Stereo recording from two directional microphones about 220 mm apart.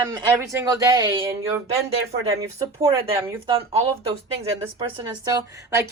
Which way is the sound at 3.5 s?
25° right (ahead or behind).